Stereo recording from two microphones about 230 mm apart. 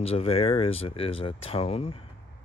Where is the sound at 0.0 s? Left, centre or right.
Left.